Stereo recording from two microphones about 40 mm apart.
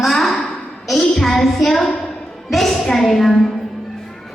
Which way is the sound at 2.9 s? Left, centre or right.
Centre.